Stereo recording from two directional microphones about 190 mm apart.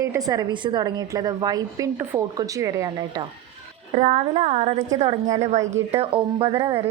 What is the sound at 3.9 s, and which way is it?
Speech, 35° right (ahead or behind).